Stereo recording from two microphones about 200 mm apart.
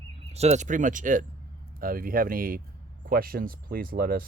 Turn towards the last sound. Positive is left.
turn(degrees=-45)  # may be behind; listen again after turning